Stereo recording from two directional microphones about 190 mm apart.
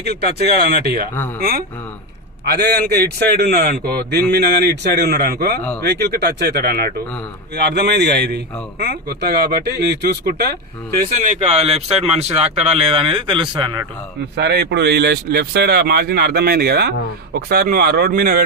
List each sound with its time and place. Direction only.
0.0 s speech: 60° right (ahead or behind)
2.4 s speech: 60° right (ahead or behind); by 13.7 s 25° right (ahead or behind)
14.3 s speech: 60° right (ahead or behind)